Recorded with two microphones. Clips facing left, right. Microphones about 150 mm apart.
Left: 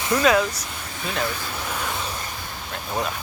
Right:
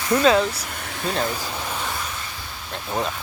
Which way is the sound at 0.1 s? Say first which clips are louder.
Right 2 dB; 30° right (ahead or behind).